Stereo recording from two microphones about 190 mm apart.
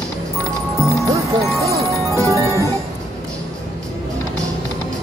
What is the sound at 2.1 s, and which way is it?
Music, 15° right (ahead or behind).